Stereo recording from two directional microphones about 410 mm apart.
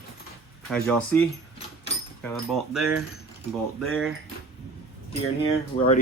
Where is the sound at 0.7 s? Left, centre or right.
Centre.